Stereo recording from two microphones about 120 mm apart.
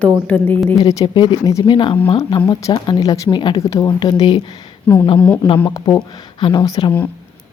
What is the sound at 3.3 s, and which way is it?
Speech, 40° left (ahead or behind).